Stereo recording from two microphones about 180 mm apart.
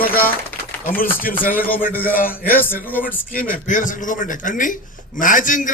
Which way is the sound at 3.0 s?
50° left (ahead or behind).